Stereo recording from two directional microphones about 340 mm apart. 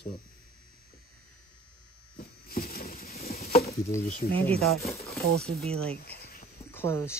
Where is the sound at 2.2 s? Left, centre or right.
Left.